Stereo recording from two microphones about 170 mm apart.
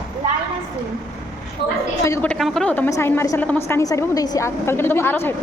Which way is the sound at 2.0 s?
15° left (ahead or behind).